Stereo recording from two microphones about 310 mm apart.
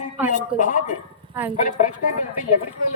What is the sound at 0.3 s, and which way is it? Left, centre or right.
Speech, left.